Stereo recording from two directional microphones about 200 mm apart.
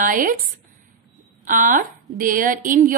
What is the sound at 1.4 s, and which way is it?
A woman's voice, 40° right (ahead or behind).